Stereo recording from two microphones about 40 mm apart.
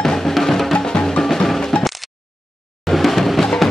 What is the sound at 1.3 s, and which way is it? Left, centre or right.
Music, centre.